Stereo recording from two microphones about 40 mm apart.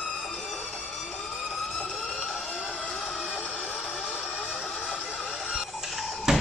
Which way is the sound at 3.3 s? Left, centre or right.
Centre.